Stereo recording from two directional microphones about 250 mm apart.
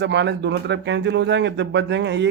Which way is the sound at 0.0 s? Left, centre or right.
Right.